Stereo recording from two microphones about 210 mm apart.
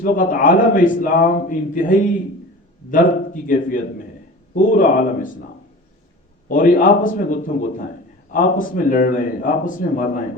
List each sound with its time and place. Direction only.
0.0 s a man's voice: 40° left (ahead or behind)
6.5 s a man's voice: 40° left (ahead or behind)